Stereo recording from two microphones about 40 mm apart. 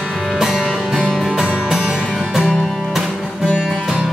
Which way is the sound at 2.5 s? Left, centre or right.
Centre.